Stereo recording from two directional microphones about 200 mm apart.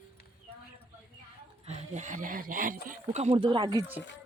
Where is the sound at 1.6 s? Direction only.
35° right (ahead or behind).